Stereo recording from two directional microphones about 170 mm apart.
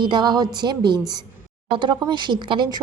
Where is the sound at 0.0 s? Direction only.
25° right (ahead or behind).